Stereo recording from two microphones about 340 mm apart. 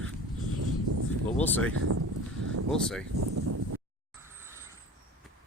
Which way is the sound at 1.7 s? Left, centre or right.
Right.